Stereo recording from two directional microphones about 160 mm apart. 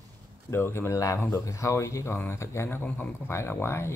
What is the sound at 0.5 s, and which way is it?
Speech, 15° left (ahead or behind).